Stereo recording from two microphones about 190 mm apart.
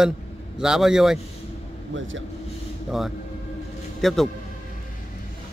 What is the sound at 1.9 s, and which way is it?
Speech, 75° right (ahead or behind).